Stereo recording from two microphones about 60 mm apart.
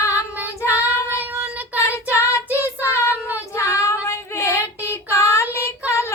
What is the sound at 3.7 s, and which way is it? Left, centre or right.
Female singing, left.